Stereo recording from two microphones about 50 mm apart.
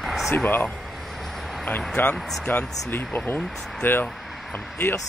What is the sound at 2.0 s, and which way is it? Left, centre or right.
Speech, left.